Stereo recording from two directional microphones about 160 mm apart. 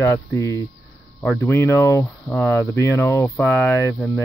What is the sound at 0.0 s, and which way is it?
Speech, 15° left (ahead or behind).